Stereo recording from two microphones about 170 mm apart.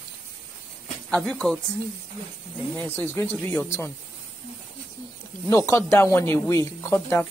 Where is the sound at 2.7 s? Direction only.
10° left (ahead or behind).